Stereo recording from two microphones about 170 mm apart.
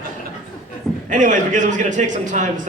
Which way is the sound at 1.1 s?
45° right (ahead or behind).